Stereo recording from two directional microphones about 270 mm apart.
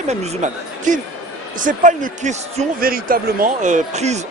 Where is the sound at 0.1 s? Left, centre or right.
Right.